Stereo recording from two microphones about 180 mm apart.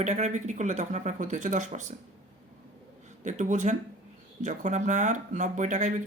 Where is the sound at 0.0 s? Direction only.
40° right (ahead or behind).